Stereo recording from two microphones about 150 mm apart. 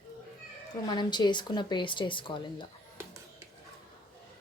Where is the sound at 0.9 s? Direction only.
30° left (ahead or behind).